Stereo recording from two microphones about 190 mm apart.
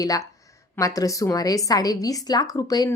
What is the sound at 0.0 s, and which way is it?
A woman's voice, 20° left (ahead or behind).